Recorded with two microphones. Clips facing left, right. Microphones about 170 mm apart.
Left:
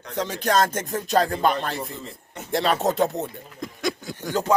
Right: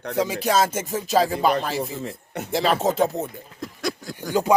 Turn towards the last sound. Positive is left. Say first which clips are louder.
# left 1 dB
turn(degrees=0)  # may be behind; listen again after turning